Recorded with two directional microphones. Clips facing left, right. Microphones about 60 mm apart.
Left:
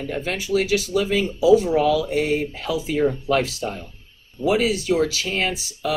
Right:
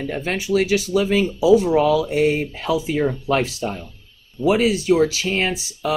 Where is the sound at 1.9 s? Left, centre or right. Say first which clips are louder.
Right 3 dB; right.